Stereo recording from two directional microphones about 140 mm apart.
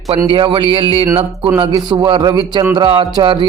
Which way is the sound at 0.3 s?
40° right (ahead or behind).